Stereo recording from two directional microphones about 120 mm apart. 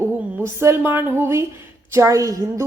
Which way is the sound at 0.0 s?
20° right (ahead or behind).